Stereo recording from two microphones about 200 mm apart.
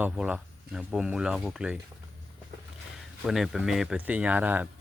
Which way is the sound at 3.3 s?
Centre (ahead or behind).